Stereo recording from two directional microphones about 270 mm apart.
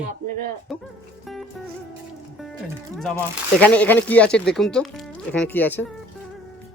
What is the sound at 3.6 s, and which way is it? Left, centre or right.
Speech, centre.